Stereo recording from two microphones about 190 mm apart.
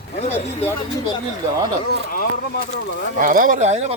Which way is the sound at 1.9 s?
50° left (ahead or behind).